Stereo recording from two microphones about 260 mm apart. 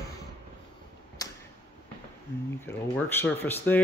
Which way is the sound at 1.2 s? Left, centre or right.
Centre.